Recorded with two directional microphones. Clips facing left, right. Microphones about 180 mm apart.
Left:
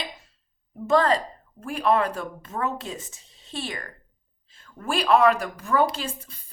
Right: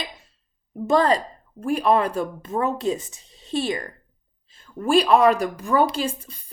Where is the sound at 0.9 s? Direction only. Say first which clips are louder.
Right 2 dB; 15° right (ahead or behind).